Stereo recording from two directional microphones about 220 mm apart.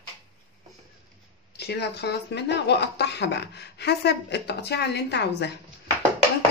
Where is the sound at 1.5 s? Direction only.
50° left (ahead or behind).